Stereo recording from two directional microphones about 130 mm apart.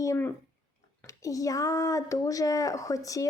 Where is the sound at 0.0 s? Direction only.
25° left (ahead or behind).